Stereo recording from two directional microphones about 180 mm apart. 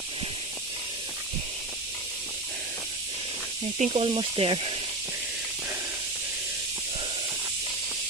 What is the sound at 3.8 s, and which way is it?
Speech, 35° right (ahead or behind).